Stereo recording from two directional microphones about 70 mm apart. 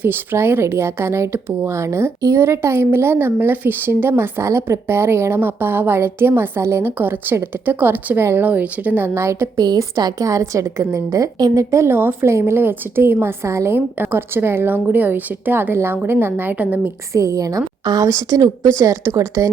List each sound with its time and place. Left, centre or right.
0.0 s speech: right
8.4 s a woman's voice: right
9.0 s speech: right
9.6 s a woman's voice: right
11.7 s speech: right
13.7 s speech: right
17.2 s a woman's voice: right